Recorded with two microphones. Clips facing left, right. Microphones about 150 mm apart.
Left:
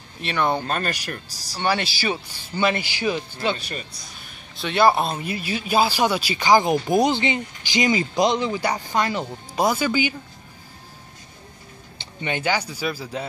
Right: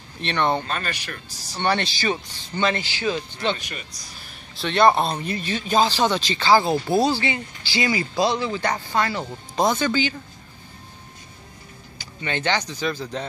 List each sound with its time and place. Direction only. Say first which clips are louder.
0.2 s speech: even; 5° left (ahead or behind)
0.7 s speech: left 3 dB; 45° left (ahead or behind)
1.5 s speech: even; 5° left (ahead or behind)
3.5 s speech: left 3 dB; 30° left (ahead or behind)
4.6 s speech: right 1 dB; 5° left (ahead or behind)
12.0 s a sound: left 2 dB; 20° left (ahead or behind)
12.4 s speech: right 1 dB; 10° left (ahead or behind)